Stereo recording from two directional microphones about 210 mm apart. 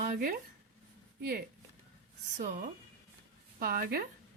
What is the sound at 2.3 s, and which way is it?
Speech, 40° right (ahead or behind).